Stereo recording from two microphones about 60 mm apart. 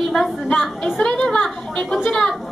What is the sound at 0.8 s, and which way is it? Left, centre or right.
A woman's voice, centre.